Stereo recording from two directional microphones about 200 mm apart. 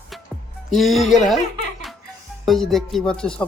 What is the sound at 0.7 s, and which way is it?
Speech, centre (ahead or behind).